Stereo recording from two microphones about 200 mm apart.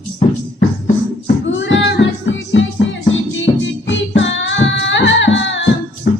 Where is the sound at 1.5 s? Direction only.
65° left (ahead or behind).